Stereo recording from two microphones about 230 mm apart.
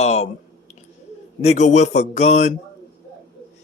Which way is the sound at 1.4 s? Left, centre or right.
Left.